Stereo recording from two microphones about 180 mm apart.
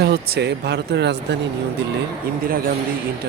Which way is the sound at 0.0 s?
65° right (ahead or behind).